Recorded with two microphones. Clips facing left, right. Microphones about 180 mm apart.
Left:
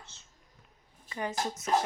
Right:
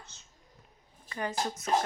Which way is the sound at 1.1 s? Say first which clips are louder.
Even; 20° left (ahead or behind).